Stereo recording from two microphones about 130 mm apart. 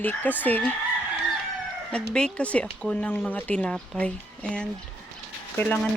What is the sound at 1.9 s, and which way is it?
Speech, 5° left (ahead or behind).